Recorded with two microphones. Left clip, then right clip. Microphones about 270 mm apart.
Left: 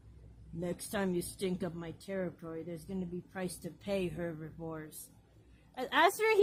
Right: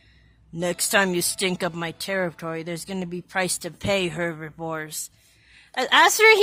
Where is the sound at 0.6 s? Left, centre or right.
Right.